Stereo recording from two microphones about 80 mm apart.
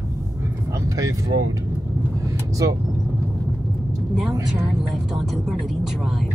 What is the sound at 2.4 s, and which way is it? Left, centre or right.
Speech, right.